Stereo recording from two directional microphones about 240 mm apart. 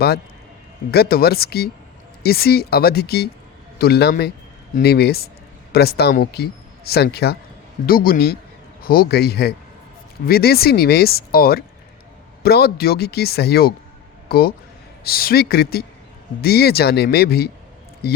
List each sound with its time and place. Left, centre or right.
0.9 s a man's voice: left